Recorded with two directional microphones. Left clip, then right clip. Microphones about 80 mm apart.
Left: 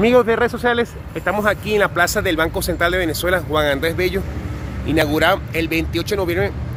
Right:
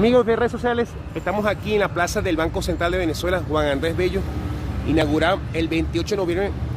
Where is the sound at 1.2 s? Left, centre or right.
Centre.